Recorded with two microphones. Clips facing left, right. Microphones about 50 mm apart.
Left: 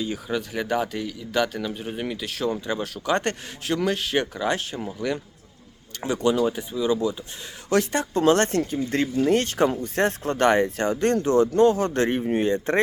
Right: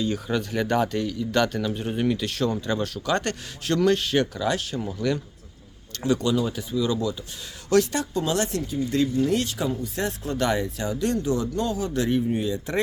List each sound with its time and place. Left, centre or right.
0.0 s speech: centre; by 8.2 s left
8.2 s speech: left